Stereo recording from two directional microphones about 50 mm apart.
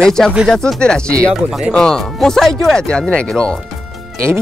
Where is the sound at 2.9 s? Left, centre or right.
Centre.